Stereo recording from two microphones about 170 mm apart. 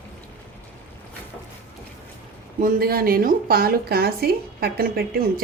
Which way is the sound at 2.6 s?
60° right (ahead or behind).